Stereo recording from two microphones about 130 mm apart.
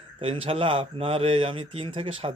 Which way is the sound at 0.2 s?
45° right (ahead or behind).